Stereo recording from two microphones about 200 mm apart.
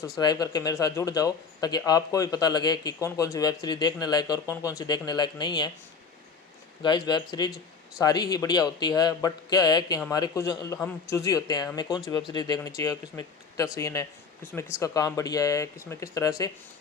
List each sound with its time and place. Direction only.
0.2 s speech: 20° left (ahead or behind)
6.8 s speech: 20° left (ahead or behind)